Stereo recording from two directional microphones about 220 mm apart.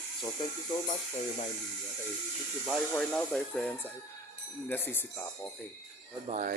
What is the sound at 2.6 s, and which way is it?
Speech, centre (ahead or behind).